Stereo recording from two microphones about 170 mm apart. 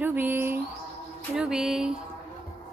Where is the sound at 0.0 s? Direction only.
10° right (ahead or behind).